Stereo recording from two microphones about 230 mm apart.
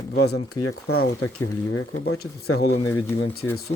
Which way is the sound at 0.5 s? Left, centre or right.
Left.